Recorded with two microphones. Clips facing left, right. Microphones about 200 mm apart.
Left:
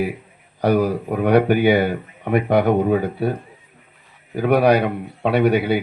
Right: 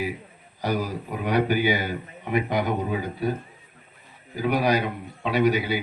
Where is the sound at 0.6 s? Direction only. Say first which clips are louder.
Left 9 dB; 60° left (ahead or behind).